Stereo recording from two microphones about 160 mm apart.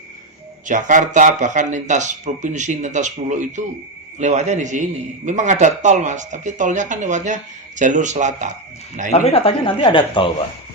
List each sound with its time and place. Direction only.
0.6 s a man's voice: 50° right (ahead or behind)
9.1 s speech: 40° left (ahead or behind)